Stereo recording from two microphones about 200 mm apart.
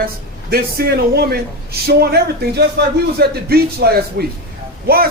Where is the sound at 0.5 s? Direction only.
50° right (ahead or behind).